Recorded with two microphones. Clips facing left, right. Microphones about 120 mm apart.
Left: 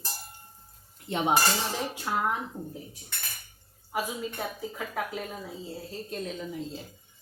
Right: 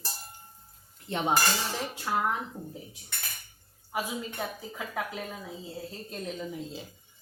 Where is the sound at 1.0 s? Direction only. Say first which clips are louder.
Left 2 dB; 15° left (ahead or behind).